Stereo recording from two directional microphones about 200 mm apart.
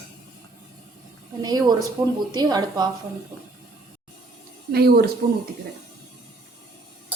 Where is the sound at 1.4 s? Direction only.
20° right (ahead or behind).